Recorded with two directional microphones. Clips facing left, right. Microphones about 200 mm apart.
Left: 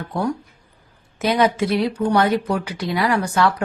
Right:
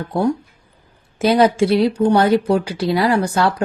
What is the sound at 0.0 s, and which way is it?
Speech, 25° right (ahead or behind).